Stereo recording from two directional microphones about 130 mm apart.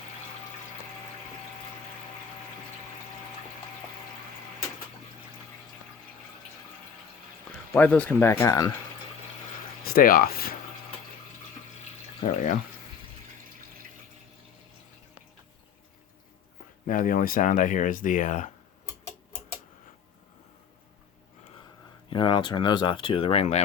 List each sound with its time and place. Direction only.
7.7 s speech: 10° left (ahead or behind)
10.0 s speech: 90° left
12.2 s speech: 90° left
16.8 s speech: 90° left; by 18.5 s 75° left (ahead or behind)
22.1 s speech: 40° left (ahead or behind); by 23.6 s 55° left (ahead or behind)